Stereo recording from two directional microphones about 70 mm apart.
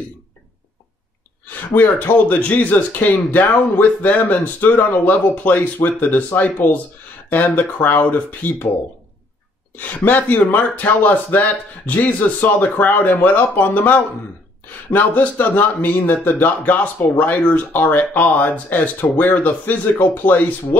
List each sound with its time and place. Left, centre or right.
1.5 s speech: left
9.8 s speech: left